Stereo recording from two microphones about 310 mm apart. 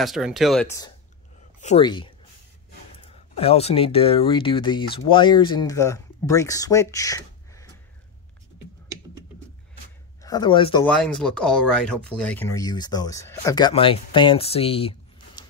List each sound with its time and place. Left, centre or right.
0.0 s speech: centre
10.2 s speech: centre